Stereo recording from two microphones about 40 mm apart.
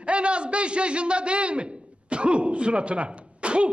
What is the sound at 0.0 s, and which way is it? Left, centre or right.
A man's voice, right.